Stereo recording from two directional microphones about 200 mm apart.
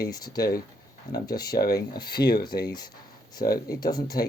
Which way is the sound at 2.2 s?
50° left (ahead or behind).